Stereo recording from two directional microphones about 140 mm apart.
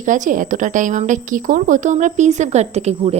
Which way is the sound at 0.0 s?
65° right (ahead or behind).